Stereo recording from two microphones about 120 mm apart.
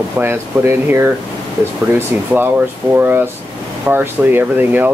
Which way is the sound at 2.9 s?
15° right (ahead or behind).